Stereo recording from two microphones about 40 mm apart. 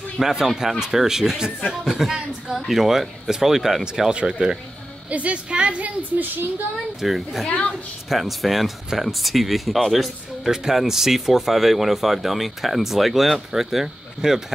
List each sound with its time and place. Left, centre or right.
0.2 s speech: centre
4.1 s speech: right
5.1 s a woman's voice: right
7.0 s speech: centre
7.4 s a woman's voice: left
8.1 s speech: centre